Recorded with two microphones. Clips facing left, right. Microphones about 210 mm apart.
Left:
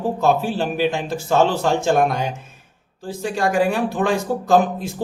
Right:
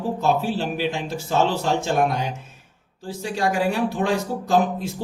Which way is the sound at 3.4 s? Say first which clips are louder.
Left 3 dB; 50° left (ahead or behind).